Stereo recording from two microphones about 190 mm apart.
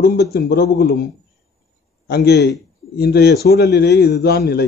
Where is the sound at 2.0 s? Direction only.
60° left (ahead or behind).